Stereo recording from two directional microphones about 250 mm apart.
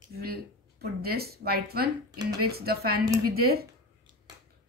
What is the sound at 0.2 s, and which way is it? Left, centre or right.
Speech, right.